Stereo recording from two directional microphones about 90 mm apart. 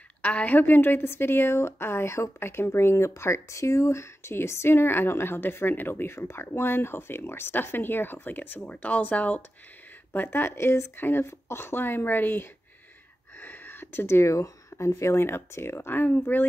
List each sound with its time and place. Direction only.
0.2 s a woman's voice: 20° left (ahead or behind)